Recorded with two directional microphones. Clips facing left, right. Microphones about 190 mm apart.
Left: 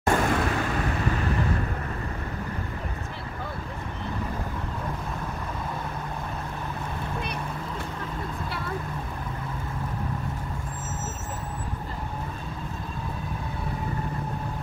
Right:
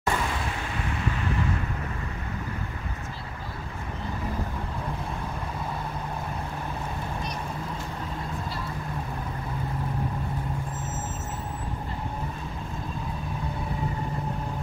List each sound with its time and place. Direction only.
0.0 s vehicle: 50° left (ahead or behind)